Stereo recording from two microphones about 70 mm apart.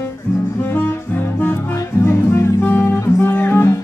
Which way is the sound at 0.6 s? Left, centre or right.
Left.